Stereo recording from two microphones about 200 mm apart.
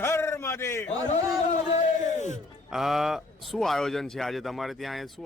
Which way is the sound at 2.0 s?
35° left (ahead or behind).